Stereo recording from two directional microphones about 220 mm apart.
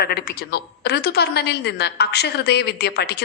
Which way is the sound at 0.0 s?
45° left (ahead or behind).